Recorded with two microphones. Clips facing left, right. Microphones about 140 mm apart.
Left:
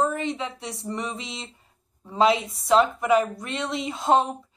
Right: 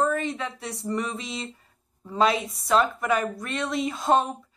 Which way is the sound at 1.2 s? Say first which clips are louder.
Right 3 dB; 25° left (ahead or behind).